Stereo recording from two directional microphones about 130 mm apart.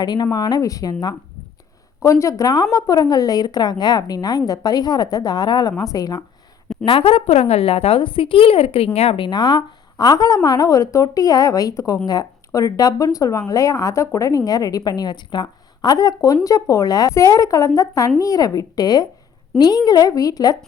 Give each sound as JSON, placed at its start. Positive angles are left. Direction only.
{"t": 0.0, "sound": "a woman's voice", "side_deg": 30}
{"t": 2.0, "sound": "a woman's voice", "side_deg": 25}
{"t": 6.8, "sound": "a woman's voice", "side_deg": 45}